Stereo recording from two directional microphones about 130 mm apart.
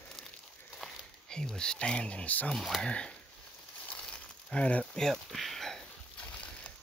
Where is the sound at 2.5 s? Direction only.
Centre (ahead or behind).